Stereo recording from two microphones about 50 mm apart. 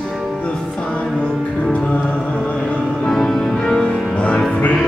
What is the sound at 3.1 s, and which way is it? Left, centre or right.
Music, centre.